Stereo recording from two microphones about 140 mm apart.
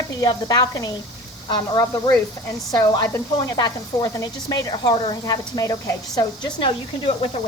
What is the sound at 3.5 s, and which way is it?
A woman's voice, 30° left (ahead or behind).